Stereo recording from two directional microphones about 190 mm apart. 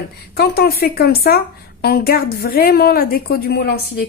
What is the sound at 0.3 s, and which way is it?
Speech, 55° left (ahead or behind).